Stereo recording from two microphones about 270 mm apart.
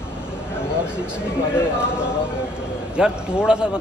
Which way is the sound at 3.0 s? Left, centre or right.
Centre.